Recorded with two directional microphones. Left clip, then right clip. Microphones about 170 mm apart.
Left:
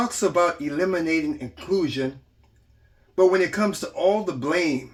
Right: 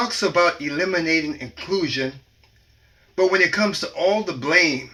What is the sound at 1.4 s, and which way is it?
Speech, 20° left (ahead or behind).